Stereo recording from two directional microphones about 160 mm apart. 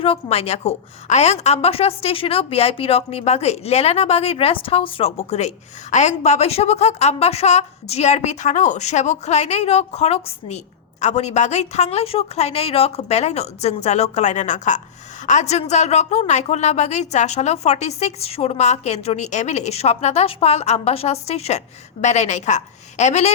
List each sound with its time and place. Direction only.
0.0 s a woman's voice: 35° left (ahead or behind)